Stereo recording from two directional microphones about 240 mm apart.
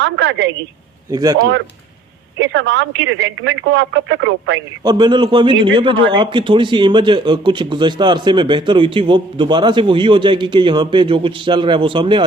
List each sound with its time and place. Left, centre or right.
0.0 s speech: right
1.1 s speech: centre
1.4 s speech: right
4.8 s a man's voice: centre